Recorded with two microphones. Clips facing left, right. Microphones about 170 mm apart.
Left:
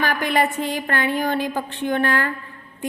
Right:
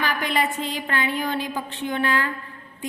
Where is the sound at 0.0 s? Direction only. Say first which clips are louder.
Left 4 dB; 50° left (ahead or behind).